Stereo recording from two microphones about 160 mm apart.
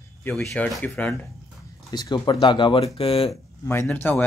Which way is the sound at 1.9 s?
25° left (ahead or behind).